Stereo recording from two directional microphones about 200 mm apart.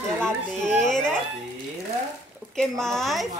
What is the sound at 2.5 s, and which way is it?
Speech, centre (ahead or behind).